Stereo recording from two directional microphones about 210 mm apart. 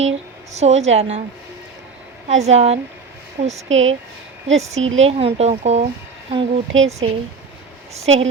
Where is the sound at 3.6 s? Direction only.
65° right (ahead or behind).